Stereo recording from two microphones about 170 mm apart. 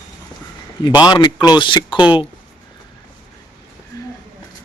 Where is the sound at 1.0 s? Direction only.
25° left (ahead or behind).